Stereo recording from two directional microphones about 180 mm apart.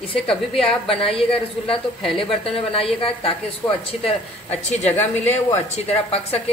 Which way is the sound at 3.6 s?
10° left (ahead or behind).